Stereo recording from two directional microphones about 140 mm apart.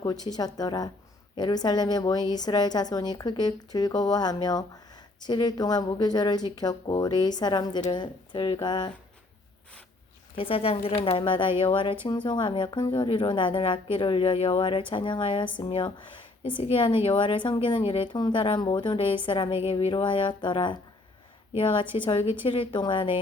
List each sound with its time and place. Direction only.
0.0 s a woman's voice: 30° left (ahead or behind)
10.3 s a woman's voice: 40° left (ahead or behind)